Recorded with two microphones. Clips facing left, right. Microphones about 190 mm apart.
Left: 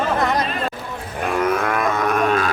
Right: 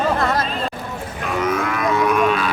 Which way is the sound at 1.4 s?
55° left (ahead or behind).